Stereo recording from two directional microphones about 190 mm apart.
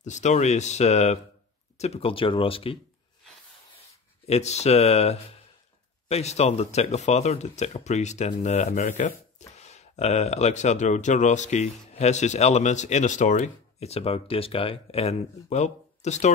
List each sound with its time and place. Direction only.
0.0 s speech: 40° left (ahead or behind)
4.3 s speech: 35° left (ahead or behind)